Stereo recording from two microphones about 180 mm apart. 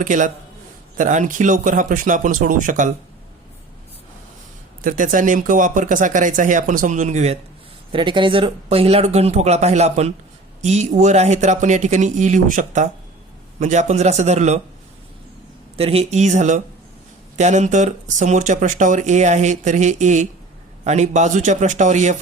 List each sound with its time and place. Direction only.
0.0 s speech: 45° right (ahead or behind)
4.8 s speech: 50° right (ahead or behind)
7.9 s speech: 25° right (ahead or behind)
15.8 s speech: 35° right (ahead or behind)